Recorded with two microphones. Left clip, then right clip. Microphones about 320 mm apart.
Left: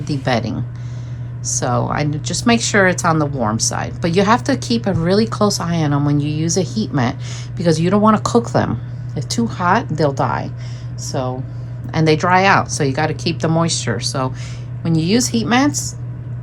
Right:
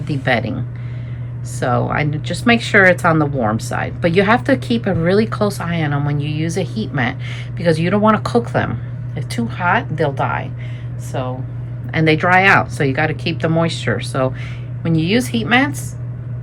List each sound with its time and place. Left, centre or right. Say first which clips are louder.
0.1 s a woman's voice: right 1 dB; centre
1.5 s a woman's voice: right 1 dB; centre